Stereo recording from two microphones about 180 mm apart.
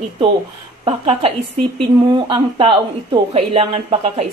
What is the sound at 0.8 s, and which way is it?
Speech, 30° right (ahead or behind).